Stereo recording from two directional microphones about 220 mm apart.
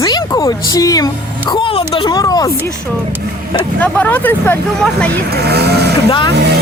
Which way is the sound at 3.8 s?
10° left (ahead or behind).